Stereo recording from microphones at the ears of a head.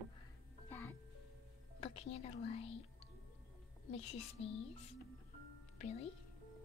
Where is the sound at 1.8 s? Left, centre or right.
Left.